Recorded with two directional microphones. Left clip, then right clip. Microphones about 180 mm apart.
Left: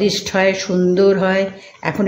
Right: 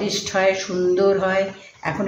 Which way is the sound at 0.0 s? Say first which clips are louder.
Left 4 dB; 50° left (ahead or behind).